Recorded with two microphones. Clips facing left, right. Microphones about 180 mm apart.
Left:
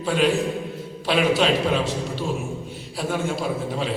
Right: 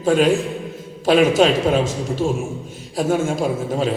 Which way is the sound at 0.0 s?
45° right (ahead or behind).